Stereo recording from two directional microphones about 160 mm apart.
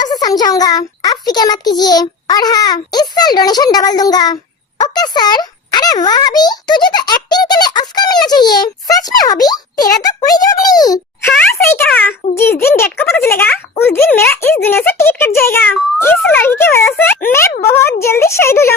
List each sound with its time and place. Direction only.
0.0 s a child's voice: 25° left (ahead or behind)